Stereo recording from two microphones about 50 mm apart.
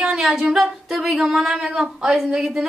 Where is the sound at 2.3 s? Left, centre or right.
Centre.